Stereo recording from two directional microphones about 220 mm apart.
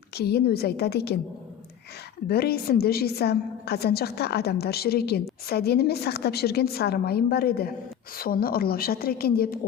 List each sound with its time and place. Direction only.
0.2 s a woman's voice: 45° left (ahead or behind)
2.2 s a woman's voice: 45° left (ahead or behind)